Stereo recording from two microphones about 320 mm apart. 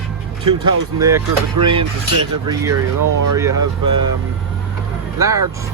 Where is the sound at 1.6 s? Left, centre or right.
Right.